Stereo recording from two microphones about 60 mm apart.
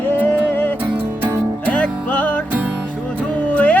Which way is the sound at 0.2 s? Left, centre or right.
Left.